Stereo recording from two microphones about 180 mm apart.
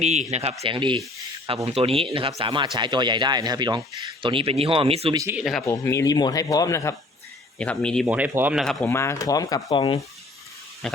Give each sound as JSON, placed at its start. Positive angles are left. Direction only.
{"t": 0.0, "sound": "speech", "side_deg": -40}
{"t": 5.1, "sound": "speech", "side_deg": -15}
{"t": 5.4, "sound": "speech", "side_deg": 0}
{"t": 5.6, "sound": "speech", "side_deg": 15}
{"t": 7.6, "sound": "speech", "side_deg": 5}
{"t": 8.0, "sound": "speech", "side_deg": -10}
{"t": 8.6, "sound": "speech", "side_deg": 5}
{"t": 8.9, "sound": "speech", "side_deg": 15}
{"t": 10.8, "sound": "speech", "side_deg": 5}